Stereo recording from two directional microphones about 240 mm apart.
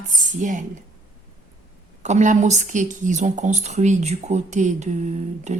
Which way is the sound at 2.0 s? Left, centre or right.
Right.